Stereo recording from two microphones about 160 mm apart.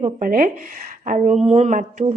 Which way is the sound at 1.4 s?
45° right (ahead or behind).